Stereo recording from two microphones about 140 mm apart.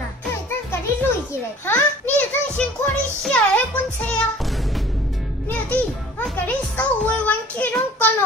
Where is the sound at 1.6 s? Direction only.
15° left (ahead or behind).